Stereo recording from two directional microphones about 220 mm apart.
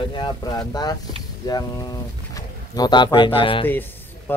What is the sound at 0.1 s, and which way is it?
Speech, 20° left (ahead or behind).